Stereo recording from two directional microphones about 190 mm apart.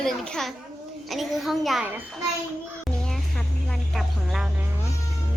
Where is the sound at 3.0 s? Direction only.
5° left (ahead or behind).